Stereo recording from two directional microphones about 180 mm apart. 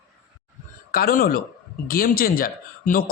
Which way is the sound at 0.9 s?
55° left (ahead or behind).